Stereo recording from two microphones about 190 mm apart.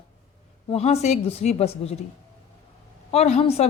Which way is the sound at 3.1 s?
35° left (ahead or behind).